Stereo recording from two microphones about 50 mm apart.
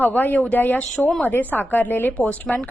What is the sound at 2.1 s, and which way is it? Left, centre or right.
Speech, left.